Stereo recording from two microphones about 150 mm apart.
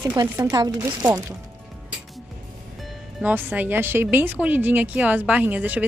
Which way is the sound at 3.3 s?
10° right (ahead or behind).